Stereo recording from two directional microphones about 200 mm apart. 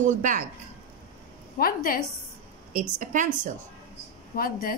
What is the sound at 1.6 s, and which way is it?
Speech, 45° left (ahead or behind).